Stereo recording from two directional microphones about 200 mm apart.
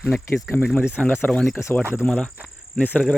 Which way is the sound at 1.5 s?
15° left (ahead or behind).